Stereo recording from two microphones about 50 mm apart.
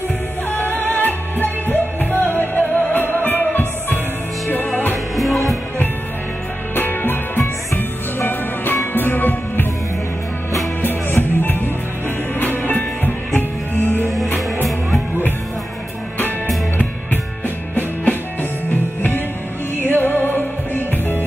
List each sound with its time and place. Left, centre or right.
0.5 s music: left
5.1 s music: centre
6.7 s music: left
10.8 s music: left
14.1 s music: centre
18.7 s music: left